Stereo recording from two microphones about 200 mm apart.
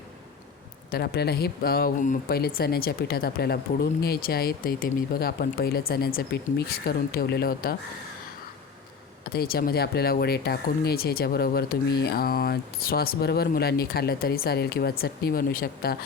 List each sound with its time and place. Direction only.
0.9 s speech: 50° left (ahead or behind)
9.3 s speech: 50° left (ahead or behind)